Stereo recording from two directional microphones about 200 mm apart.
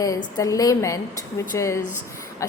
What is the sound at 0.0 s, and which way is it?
A woman's voice, 15° left (ahead or behind).